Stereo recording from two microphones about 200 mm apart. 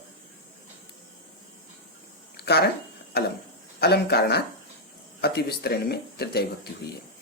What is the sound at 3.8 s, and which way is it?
Speech, 55° left (ahead or behind).